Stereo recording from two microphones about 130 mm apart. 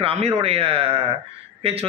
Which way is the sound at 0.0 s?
50° right (ahead or behind).